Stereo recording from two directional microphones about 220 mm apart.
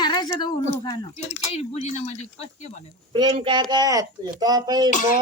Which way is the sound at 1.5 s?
30° left (ahead or behind).